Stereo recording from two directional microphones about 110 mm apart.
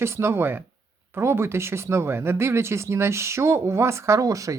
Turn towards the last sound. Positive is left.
turn(degrees=-30)  # may be behind; listen again after turning